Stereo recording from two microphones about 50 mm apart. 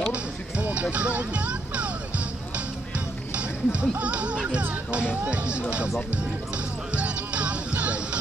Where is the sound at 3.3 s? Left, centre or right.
Right.